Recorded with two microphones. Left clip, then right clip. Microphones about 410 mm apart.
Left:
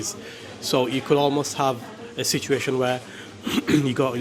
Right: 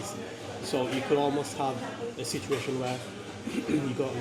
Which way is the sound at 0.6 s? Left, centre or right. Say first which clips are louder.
Left 8 dB; left.